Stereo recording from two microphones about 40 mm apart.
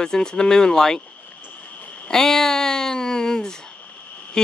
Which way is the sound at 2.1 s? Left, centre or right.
Centre.